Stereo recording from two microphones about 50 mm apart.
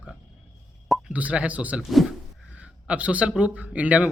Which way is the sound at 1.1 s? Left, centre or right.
Right.